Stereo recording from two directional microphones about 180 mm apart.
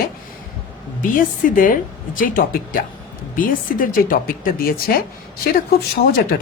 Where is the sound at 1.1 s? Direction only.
50° left (ahead or behind).